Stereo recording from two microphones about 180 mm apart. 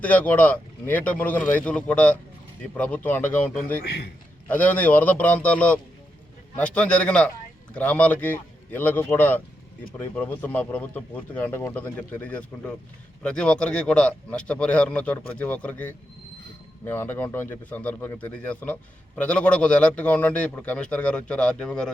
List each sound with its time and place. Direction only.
0.0 s a man's voice: 10° left (ahead or behind)
3.8 s a man's voice: 60° left (ahead or behind)
4.4 s a man's voice: 10° left (ahead or behind)